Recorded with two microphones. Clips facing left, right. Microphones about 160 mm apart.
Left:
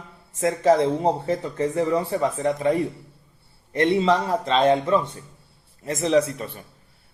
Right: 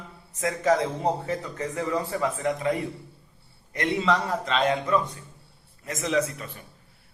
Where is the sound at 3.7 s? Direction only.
30° left (ahead or behind).